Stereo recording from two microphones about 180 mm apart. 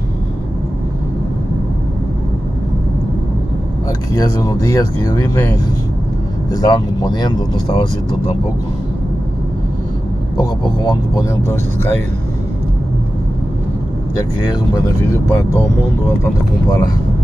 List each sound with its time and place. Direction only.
4.1 s speech: 20° left (ahead or behind)
6.5 s speech: 20° left (ahead or behind)
16.6 s speech: 20° left (ahead or behind)